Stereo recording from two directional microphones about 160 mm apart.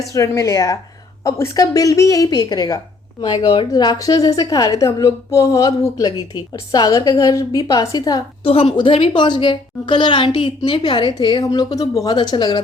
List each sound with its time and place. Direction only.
0.1 s a woman's voice: 20° left (ahead or behind)
8.4 s a woman's voice: 35° left (ahead or behind)